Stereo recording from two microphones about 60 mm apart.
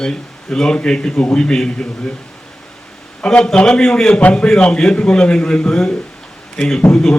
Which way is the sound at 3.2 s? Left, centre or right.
Centre.